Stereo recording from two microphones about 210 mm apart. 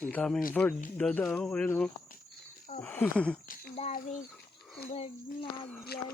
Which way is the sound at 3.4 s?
45° left (ahead or behind).